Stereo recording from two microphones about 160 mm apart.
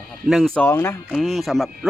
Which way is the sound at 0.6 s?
15° left (ahead or behind).